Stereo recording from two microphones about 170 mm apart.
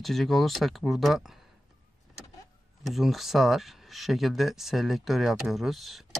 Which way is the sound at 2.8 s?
Centre (ahead or behind).